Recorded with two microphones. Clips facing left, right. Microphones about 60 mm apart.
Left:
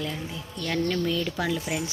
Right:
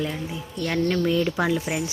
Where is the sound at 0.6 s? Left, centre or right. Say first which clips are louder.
Right 3 dB; centre.